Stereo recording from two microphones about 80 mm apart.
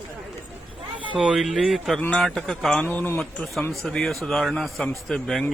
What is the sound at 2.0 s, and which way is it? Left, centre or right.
Speech, centre.